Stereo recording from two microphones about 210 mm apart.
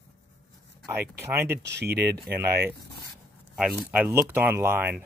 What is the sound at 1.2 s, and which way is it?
Speech, 10° right (ahead or behind).